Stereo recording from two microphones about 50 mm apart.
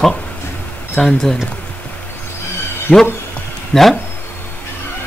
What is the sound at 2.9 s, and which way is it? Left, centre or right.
Speech, left.